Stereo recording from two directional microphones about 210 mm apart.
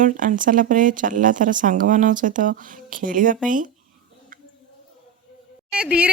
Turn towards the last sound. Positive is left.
turn(degrees=-5)  # may be behind; listen again after turning